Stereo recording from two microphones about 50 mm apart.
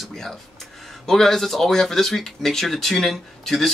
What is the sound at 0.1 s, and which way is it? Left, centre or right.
Speech, centre.